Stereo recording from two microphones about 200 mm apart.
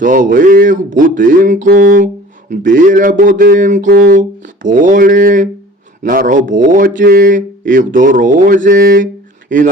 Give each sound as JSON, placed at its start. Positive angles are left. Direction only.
{"t": 0.0, "sound": "speech", "side_deg": -40}